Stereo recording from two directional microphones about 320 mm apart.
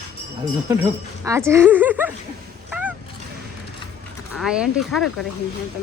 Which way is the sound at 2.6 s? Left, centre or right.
Centre.